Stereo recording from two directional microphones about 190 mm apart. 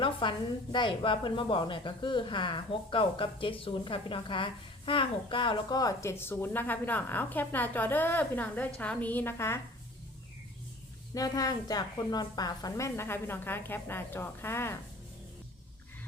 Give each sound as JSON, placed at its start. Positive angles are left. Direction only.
{"t": 0.0, "sound": "a woman's voice", "side_deg": 25}
{"t": 11.1, "sound": "a woman's voice", "side_deg": 20}